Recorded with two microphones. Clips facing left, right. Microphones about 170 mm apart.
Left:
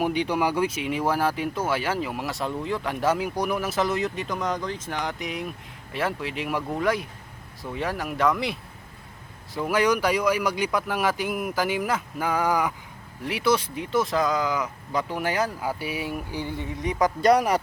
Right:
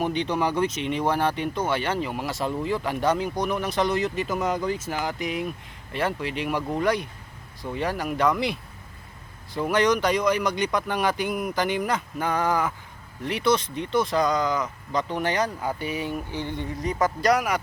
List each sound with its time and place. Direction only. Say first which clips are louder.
0.0 s speech: left 1 dB; 10° left (ahead or behind)
9.6 s speech: right 1 dB; 5° left (ahead or behind)
17.0 s speech: left 3 dB; 25° left (ahead or behind)